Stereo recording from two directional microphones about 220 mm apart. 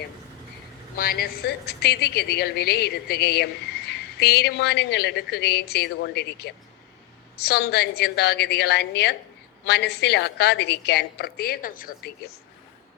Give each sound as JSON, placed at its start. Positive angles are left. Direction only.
{"t": 0.9, "sound": "a woman's voice", "side_deg": 40}